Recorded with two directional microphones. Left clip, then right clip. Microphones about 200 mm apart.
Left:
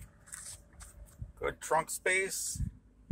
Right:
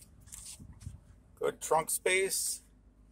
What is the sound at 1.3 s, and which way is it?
Speech, 15° right (ahead or behind).